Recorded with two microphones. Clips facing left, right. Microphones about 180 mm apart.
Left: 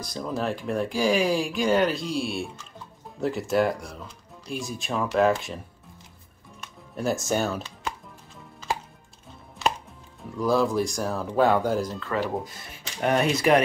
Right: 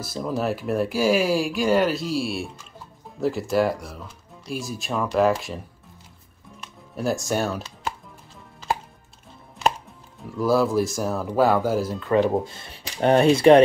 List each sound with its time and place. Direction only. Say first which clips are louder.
0.0 s speech: right 3 dB; 5° right (ahead or behind)
7.0 s speech: right 1 dB; centre (ahead or behind)
10.3 s speech: right 3 dB; 5° right (ahead or behind)
12.0 s speech: right 8 dB; 20° right (ahead or behind)